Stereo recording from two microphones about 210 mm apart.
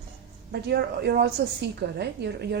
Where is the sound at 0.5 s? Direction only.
50° right (ahead or behind).